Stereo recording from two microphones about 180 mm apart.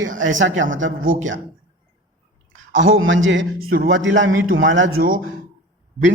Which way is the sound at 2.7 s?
90° right.